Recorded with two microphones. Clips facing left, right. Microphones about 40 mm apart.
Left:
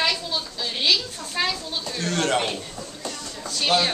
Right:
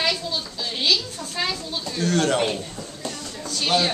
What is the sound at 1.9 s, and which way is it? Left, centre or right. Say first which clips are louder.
Speech: right 2 dB; centre.